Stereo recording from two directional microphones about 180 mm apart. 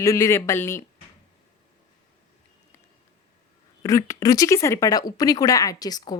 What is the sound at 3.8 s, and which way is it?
A woman's voice, 15° left (ahead or behind).